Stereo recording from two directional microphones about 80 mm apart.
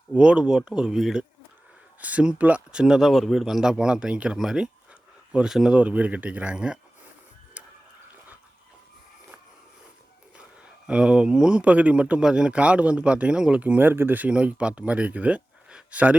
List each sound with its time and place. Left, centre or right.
0.1 s speech: centre
2.0 s speech: centre
7.6 s water: centre
10.8 s speech: centre